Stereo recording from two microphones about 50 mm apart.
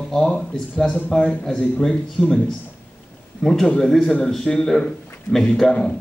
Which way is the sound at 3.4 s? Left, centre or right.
Centre.